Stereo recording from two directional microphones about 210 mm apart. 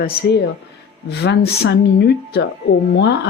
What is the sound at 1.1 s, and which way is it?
Speech, 50° left (ahead or behind).